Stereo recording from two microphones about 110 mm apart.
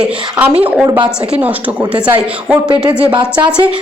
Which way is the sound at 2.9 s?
10° right (ahead or behind).